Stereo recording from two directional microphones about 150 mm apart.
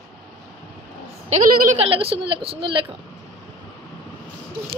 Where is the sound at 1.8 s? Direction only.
40° right (ahead or behind).